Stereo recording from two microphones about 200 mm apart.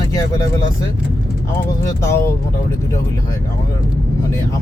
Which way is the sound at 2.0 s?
15° left (ahead or behind).